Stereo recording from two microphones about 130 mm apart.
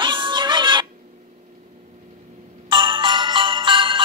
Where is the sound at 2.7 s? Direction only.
35° right (ahead or behind).